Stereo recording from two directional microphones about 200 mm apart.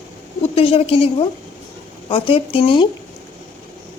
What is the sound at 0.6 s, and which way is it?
A woman's voice, 30° left (ahead or behind).